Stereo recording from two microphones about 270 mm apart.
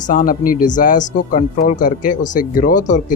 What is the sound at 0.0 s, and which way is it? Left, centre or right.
Speech, left.